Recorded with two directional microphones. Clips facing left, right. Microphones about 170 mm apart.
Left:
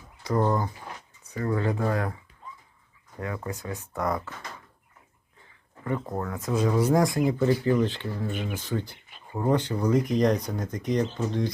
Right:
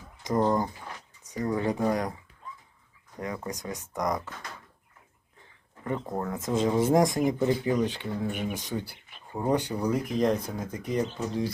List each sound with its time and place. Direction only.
0.2 s speech: 20° right (ahead or behind)
3.2 s speech: 15° right (ahead or behind)
6.1 s speech: 20° right (ahead or behind); by 11.5 s 5° right (ahead or behind)